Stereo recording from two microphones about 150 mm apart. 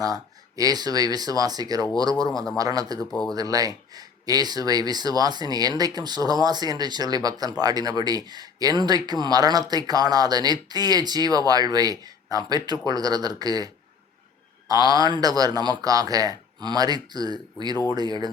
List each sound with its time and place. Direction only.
0.0 s speech: 25° right (ahead or behind)
3.1 s speech: 5° left (ahead or behind)
3.3 s speech: 25° right (ahead or behind)
14.7 s speech: 25° right (ahead or behind)